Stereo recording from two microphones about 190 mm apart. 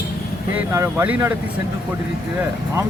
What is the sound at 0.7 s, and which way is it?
Speech, 10° right (ahead or behind).